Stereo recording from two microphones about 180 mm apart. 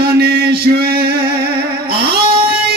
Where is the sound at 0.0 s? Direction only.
60° right (ahead or behind).